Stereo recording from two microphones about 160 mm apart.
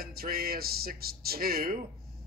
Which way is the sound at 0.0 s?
70° right (ahead or behind).